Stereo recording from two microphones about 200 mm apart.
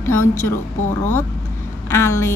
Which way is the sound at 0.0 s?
10° left (ahead or behind).